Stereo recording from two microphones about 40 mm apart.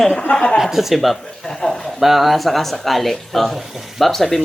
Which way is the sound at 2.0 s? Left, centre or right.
Centre.